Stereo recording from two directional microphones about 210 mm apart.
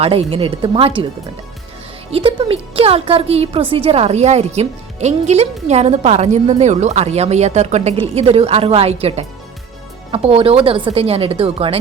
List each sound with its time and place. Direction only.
0.0 s speech: 25° right (ahead or behind)
2.0 s a woman's voice: 25° right (ahead or behind)